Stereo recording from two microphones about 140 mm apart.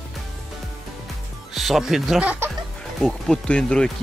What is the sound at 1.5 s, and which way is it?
Speech, centre (ahead or behind).